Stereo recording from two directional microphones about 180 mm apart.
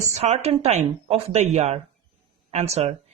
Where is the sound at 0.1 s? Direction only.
35° right (ahead or behind).